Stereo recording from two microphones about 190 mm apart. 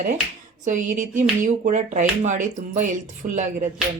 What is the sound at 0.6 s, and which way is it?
Speech, 40° right (ahead or behind).